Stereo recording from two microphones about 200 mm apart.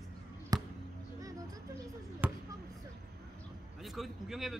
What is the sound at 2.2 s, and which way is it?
Basketball bounce, 10° right (ahead or behind).